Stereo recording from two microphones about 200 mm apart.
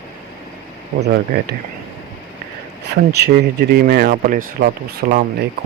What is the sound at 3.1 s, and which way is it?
Speech, 50° right (ahead or behind).